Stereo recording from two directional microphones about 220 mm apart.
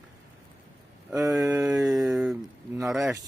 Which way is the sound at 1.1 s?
15° right (ahead or behind).